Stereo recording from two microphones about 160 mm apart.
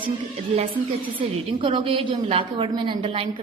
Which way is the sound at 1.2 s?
30° right (ahead or behind).